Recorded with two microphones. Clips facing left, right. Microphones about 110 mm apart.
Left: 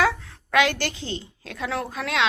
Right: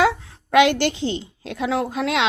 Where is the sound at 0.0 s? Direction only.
25° right (ahead or behind).